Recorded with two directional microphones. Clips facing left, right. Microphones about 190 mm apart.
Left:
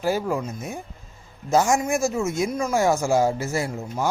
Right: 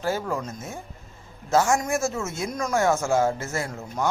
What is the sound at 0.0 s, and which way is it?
Speech, 15° left (ahead or behind).